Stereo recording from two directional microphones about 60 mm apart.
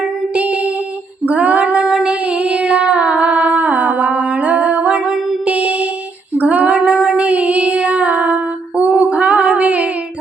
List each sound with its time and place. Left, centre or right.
0.3 s music: right
1.2 s female singing: right
5.5 s music: right
6.3 s female singing: right